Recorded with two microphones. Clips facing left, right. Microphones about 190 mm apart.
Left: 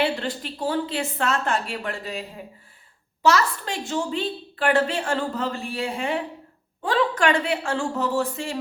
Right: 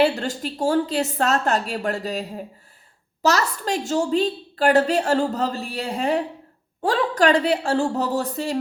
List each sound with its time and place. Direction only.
0.0 s a woman's voice: 45° right (ahead or behind)